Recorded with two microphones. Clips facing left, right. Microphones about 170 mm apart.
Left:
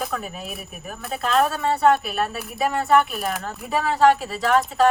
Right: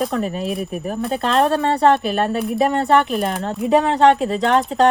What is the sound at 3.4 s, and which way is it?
Speech, 25° right (ahead or behind).